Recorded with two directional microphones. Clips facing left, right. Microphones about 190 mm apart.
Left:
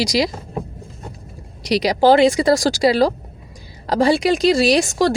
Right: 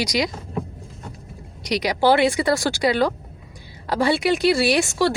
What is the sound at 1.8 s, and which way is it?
Speech, 40° left (ahead or behind).